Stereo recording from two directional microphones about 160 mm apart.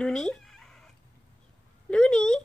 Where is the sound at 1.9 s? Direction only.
5° left (ahead or behind).